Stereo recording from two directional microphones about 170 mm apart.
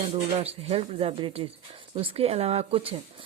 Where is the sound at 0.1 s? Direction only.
35° right (ahead or behind).